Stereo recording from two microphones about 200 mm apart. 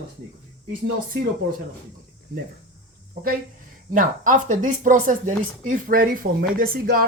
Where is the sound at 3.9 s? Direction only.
40° right (ahead or behind).